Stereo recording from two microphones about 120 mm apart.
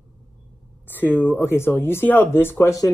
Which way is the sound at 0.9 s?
15° left (ahead or behind).